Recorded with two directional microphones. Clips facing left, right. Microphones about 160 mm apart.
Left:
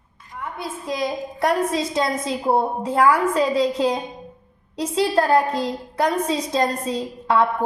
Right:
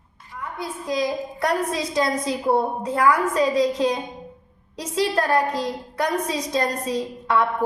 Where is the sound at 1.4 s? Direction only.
25° left (ahead or behind).